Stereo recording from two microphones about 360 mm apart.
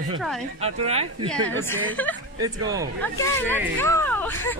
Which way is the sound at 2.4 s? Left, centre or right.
Centre.